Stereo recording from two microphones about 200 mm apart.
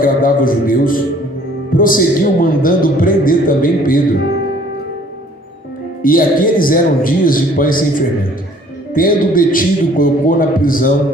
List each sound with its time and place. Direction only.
0.0 s a man's voice: 45° left (ahead or behind)
6.0 s a man's voice: 45° left (ahead or behind)